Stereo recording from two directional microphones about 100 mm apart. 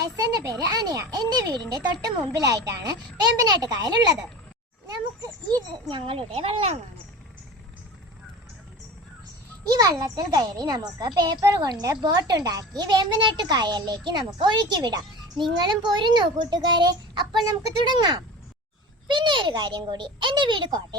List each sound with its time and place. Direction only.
0.0 s a child's voice: 40° right (ahead or behind)
5.2 s a sound: 40° right (ahead or behind)
5.9 s a child's voice: 65° right (ahead or behind); by 6.7 s 85° right
9.6 s a child's voice: 35° right (ahead or behind)